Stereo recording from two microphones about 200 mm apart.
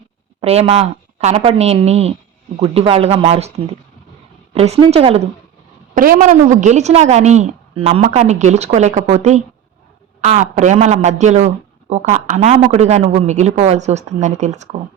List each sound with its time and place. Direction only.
0.4 s speech: 30° right (ahead or behind)
5.9 s speech: 45° right (ahead or behind)